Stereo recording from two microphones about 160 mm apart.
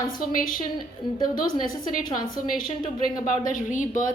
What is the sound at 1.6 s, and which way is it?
Speech, 60° left (ahead or behind).